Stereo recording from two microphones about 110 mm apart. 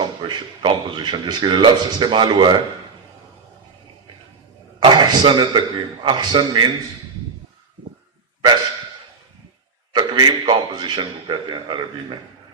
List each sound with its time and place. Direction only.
0.0 s speech: 45° right (ahead or behind)
4.8 s speech: 40° right (ahead or behind)
9.9 s speech: 40° right (ahead or behind)